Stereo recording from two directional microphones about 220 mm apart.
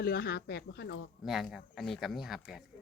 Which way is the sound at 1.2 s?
Centre (ahead or behind).